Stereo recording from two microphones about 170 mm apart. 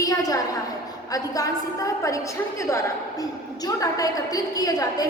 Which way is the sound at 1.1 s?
20° left (ahead or behind).